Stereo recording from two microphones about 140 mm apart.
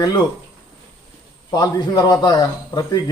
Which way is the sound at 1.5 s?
25° left (ahead or behind).